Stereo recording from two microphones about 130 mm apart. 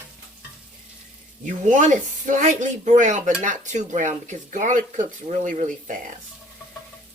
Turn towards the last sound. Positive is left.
turn(degrees=-80)